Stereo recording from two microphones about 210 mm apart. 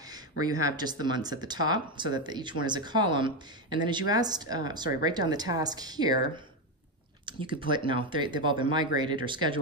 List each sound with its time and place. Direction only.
0.1 s speech: 20° right (ahead or behind)